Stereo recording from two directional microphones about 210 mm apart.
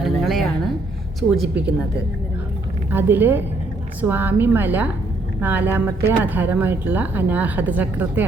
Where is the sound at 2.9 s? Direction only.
10° right (ahead or behind).